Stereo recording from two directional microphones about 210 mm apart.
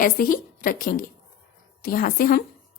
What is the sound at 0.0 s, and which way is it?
A woman's voice, 40° left (ahead or behind).